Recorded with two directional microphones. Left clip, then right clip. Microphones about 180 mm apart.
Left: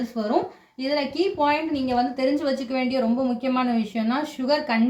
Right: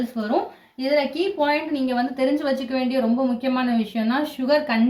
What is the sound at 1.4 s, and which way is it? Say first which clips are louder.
Speech: right 2 dB; 25° left (ahead or behind).